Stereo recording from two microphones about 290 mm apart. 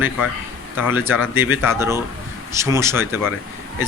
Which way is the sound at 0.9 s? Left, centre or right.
Centre.